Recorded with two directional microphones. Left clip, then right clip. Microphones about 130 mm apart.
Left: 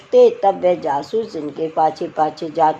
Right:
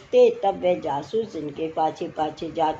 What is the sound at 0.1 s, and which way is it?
Speech, 30° left (ahead or behind).